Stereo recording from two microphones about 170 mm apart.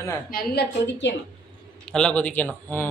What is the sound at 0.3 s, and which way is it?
Speech, 60° left (ahead or behind).